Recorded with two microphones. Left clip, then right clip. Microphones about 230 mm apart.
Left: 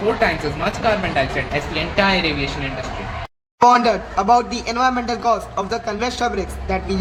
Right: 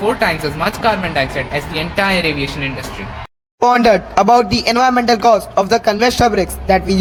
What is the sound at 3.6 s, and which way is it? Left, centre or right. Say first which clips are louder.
A man's voice: right 2 dB; right.